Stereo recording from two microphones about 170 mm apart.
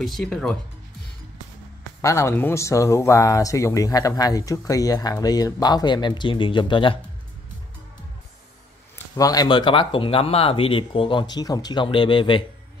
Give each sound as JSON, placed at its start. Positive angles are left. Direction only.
{"t": 0.0, "sound": "speech", "side_deg": 0}
{"t": 2.0, "sound": "speech", "side_deg": 15}
{"t": 8.9, "sound": "speech", "side_deg": 20}